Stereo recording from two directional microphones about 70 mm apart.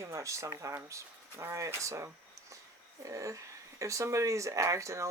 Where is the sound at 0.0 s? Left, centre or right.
Right.